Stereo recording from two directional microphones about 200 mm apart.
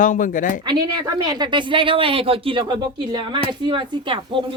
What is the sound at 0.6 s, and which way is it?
Speech, 20° right (ahead or behind).